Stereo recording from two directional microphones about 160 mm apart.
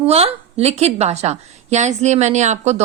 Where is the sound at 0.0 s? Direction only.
40° right (ahead or behind).